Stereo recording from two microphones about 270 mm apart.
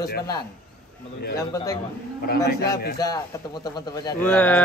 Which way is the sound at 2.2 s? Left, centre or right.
Left.